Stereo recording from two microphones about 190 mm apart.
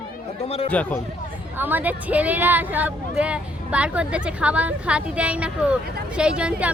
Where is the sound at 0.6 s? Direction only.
10° left (ahead or behind).